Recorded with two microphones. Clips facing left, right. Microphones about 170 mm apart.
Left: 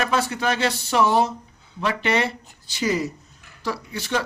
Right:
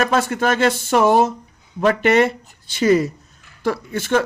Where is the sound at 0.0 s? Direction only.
50° right (ahead or behind).